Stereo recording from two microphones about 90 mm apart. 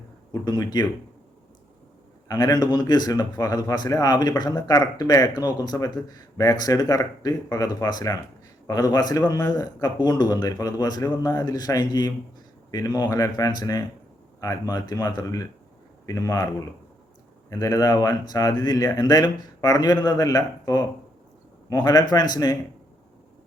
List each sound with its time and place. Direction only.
0.4 s speech: 45° left (ahead or behind)
2.2 s speech: 45° left (ahead or behind)